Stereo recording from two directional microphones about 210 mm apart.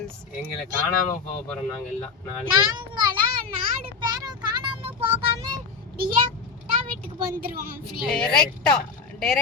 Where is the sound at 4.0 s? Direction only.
20° right (ahead or behind).